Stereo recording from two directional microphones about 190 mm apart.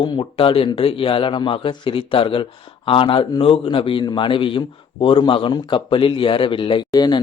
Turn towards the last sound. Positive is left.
turn(degrees=25)  # may be behind; listen again after turning